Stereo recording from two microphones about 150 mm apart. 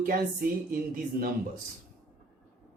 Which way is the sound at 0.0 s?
70° right (ahead or behind).